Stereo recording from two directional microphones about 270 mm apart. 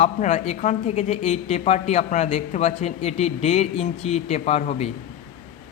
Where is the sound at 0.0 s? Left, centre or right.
Left.